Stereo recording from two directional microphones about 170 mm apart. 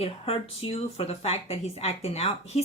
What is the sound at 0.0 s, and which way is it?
Speech, 35° left (ahead or behind).